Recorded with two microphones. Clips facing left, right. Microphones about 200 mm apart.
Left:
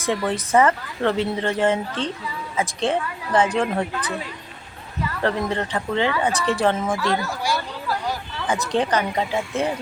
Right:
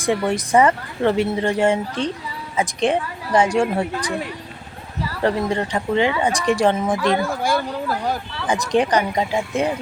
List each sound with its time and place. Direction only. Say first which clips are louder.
0.3 s speech: right 1 dB; 15° right (ahead or behind)
5.2 s speech: right 3 dB; 15° right (ahead or behind)
7.2 s speech: right 5 dB; 55° right (ahead or behind)
8.4 s speech: right 3 dB; 15° right (ahead or behind)